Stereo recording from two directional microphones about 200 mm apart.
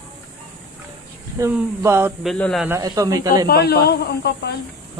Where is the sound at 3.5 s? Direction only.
55° left (ahead or behind).